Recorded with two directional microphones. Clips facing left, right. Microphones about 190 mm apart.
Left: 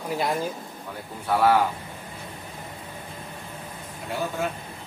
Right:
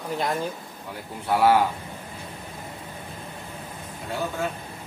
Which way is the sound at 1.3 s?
20° right (ahead or behind).